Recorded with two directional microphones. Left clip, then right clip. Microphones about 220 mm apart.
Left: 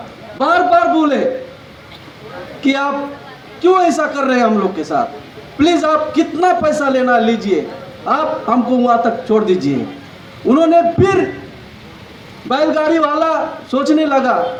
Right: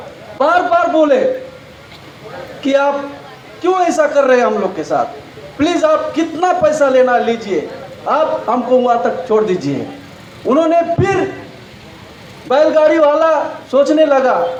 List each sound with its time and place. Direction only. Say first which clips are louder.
0.3 s a man's voice: even; 25° left (ahead or behind)
2.6 s a man's voice: right 3 dB; 25° left (ahead or behind)
12.5 s a man's voice: right 4 dB; 25° left (ahead or behind)